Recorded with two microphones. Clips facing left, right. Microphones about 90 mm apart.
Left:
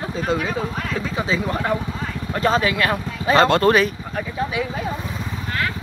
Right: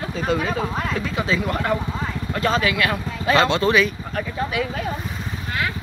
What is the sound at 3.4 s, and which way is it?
Speech, 50° left (ahead or behind).